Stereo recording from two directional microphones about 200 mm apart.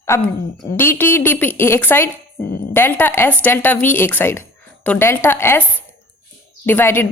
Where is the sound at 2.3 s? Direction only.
50° left (ahead or behind).